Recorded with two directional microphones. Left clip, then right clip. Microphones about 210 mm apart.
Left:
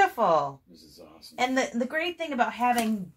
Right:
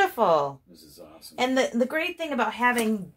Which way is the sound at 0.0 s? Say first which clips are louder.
Right 1 dB; 30° right (ahead or behind).